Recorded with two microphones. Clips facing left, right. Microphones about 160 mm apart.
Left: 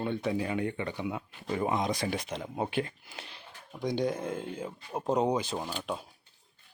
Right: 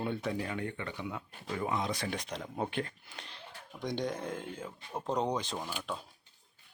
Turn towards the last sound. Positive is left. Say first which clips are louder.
# left 4 dB
turn(degrees=10)  # may be behind; listen again after turning